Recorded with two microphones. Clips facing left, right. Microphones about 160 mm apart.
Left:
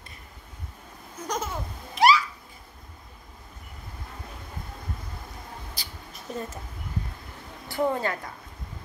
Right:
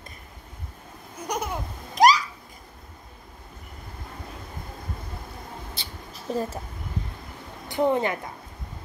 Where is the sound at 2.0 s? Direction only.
40° right (ahead or behind).